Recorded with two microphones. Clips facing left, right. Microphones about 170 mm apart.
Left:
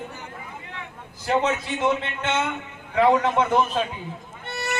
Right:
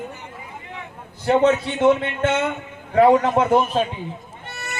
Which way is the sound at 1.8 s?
45° right (ahead or behind).